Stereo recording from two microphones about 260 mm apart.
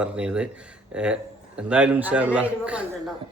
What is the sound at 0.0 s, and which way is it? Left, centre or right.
Speech, centre.